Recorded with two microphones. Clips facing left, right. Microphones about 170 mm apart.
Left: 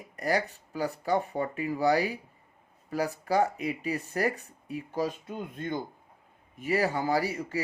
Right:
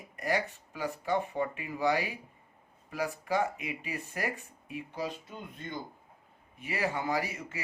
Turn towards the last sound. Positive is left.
turn(degrees=35)  # may be behind; listen again after turning